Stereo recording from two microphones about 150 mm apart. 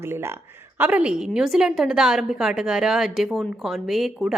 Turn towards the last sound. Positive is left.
turn(degrees=0)  # may be behind; listen again after turning